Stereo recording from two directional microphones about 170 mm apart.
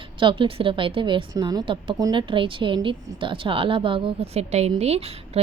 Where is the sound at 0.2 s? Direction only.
30° right (ahead or behind).